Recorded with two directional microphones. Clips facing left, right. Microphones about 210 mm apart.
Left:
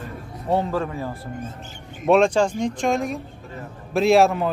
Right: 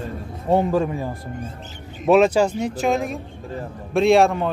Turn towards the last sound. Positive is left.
turn(degrees=0)  # may be behind; listen again after turning